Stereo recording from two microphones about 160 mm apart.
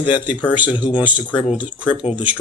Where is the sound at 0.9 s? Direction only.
10° right (ahead or behind).